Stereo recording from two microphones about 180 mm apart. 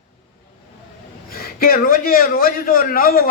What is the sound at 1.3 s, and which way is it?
A man's voice, 55° left (ahead or behind).